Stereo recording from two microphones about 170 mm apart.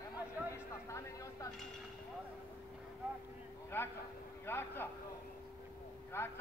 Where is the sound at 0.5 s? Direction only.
15° left (ahead or behind).